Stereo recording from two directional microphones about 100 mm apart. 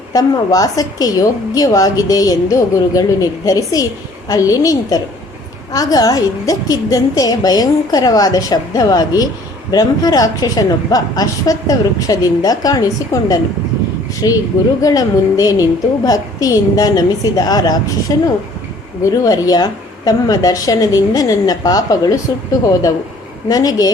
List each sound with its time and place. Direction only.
0.1 s a woman's voice: 35° left (ahead or behind)
19.0 s a woman's voice: 35° left (ahead or behind)
23.5 s a woman's voice: 40° left (ahead or behind)